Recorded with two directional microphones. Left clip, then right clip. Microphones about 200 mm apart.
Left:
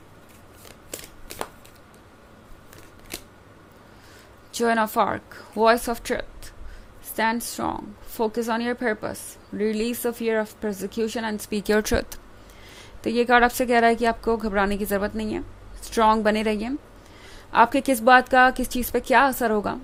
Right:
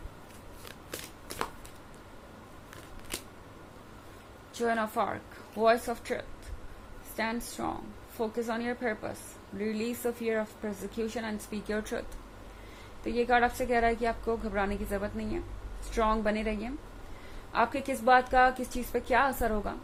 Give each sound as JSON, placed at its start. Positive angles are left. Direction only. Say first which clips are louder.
{"t": 4.5, "sound": "speech", "louder": "left 9 dB", "side_deg": 50}
{"t": 13.1, "sound": "a woman's voice", "louder": "left 8 dB", "side_deg": 55}